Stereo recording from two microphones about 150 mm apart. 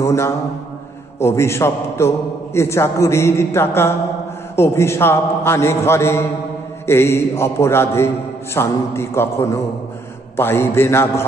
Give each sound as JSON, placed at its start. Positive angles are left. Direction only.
{"t": 0.0, "sound": "mantra", "side_deg": 20}
{"t": 1.2, "sound": "a man's voice", "side_deg": 15}